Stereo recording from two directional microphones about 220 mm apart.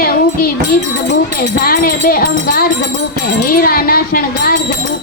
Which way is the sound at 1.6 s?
40° left (ahead or behind).